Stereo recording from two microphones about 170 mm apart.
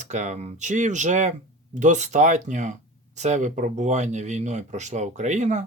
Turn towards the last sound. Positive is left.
turn(degrees=-45)  # may be behind; listen again after turning